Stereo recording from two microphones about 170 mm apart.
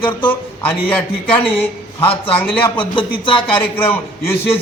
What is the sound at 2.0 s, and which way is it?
A man's voice, 30° left (ahead or behind).